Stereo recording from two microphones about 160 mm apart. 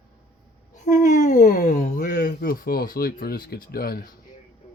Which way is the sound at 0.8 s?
50° left (ahead or behind).